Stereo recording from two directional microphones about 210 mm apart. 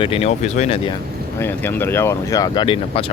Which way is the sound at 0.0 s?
25° left (ahead or behind).